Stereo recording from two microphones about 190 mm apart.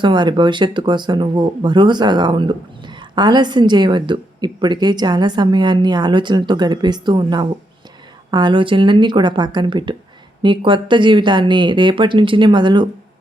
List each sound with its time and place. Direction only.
0.0 s speech: 25° right (ahead or behind)